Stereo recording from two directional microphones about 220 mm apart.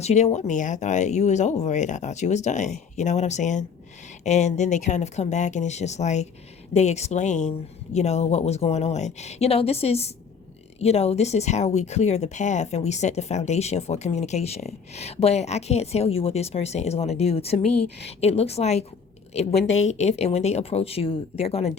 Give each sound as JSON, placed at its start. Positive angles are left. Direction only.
{"t": 0.0, "sound": "a woman's voice", "side_deg": 30}